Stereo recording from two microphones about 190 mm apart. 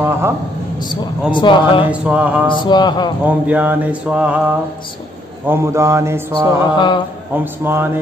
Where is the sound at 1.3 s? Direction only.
25° left (ahead or behind).